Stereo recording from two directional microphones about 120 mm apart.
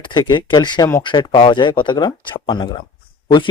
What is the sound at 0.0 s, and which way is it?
Speech, 40° left (ahead or behind).